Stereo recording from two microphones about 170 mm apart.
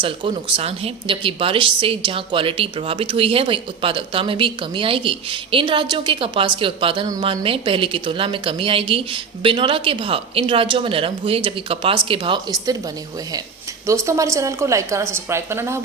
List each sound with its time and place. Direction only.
0.0 s speech: 30° right (ahead or behind)
13.8 s a woman's voice: 15° right (ahead or behind)